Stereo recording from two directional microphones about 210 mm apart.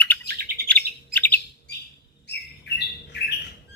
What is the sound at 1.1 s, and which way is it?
Bird, 10° left (ahead or behind).